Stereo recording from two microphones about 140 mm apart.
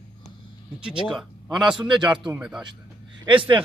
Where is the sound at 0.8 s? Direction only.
5° right (ahead or behind).